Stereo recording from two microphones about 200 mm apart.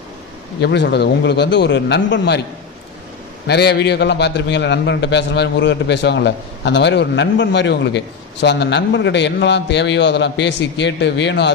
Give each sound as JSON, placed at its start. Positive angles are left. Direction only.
{"t": 0.6, "sound": "a man's voice", "side_deg": 55}
{"t": 3.4, "sound": "a man's voice", "side_deg": 55}